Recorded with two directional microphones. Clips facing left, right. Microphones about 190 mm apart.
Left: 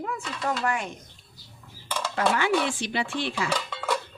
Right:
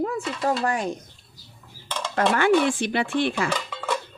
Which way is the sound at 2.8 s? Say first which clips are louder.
Right 6 dB; 55° right (ahead or behind).